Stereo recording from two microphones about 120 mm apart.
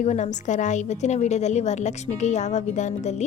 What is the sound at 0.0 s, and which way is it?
A woman's voice, 80° left.